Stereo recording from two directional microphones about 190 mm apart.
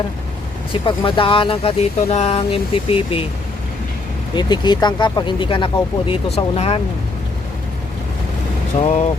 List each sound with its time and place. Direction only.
0.7 s speech: 25° left (ahead or behind)
4.4 s speech: 20° left (ahead or behind)